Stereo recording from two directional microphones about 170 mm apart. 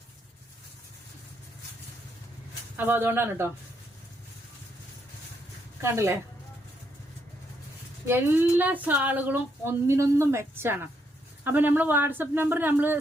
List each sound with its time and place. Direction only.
2.7 s speech: 10° right (ahead or behind)
5.8 s speech: 15° right (ahead or behind)
8.0 s speech: 15° right (ahead or behind)